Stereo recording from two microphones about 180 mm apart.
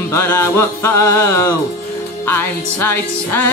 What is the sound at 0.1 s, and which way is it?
Music, 15° left (ahead or behind).